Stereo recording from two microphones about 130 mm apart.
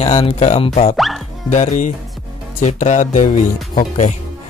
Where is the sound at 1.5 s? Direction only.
70° left (ahead or behind).